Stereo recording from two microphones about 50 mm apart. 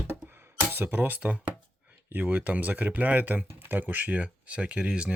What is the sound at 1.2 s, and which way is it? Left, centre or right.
Speech, right.